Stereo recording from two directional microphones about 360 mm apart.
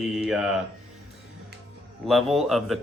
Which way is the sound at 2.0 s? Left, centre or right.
Centre.